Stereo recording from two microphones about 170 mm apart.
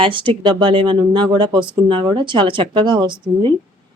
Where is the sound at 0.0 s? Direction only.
30° right (ahead or behind).